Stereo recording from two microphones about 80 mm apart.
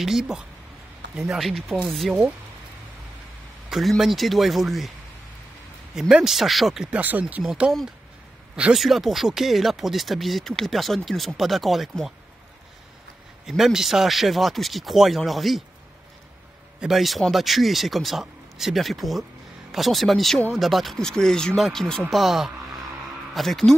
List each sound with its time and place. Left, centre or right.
0.0 s speech: centre
4.0 s speech: centre
5.9 s speech: centre
6.9 s speech: centre
8.7 s speech: centre
13.5 s speech: centre
16.8 s speech: centre